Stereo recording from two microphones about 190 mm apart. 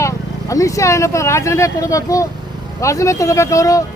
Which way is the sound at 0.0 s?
15° left (ahead or behind).